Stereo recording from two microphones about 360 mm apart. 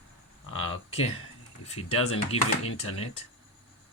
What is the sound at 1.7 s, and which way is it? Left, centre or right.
Speech, centre.